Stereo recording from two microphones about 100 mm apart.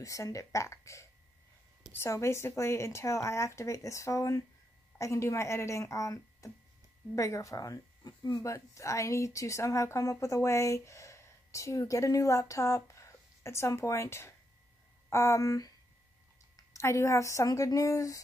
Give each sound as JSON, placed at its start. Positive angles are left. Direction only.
{"t": 0.0, "sound": "speech", "side_deg": 35}